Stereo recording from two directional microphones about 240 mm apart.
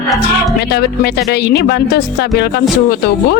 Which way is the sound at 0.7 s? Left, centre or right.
Left.